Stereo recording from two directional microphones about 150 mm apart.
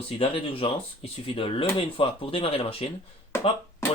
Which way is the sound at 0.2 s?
35° left (ahead or behind).